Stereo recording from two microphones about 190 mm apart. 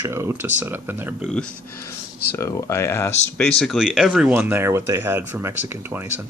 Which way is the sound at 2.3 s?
15° left (ahead or behind).